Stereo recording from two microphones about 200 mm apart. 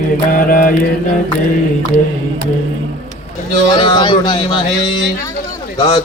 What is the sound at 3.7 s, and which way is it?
Speech, 25° left (ahead or behind).